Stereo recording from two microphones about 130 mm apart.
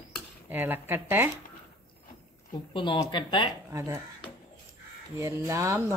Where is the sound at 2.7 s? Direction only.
40° left (ahead or behind).